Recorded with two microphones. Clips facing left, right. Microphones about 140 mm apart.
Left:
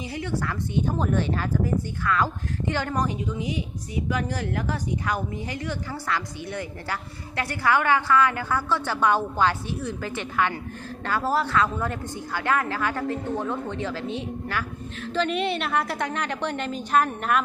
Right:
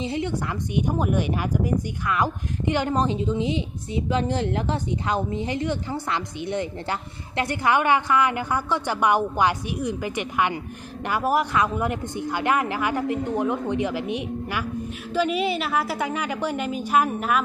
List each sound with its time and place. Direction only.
0.0 s speech: 25° right (ahead or behind); by 17.4 s 5° right (ahead or behind)